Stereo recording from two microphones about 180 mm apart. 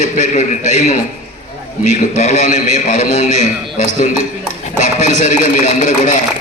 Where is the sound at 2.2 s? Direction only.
45° left (ahead or behind).